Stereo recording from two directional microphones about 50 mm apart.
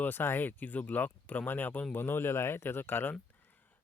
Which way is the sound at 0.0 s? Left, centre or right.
Left.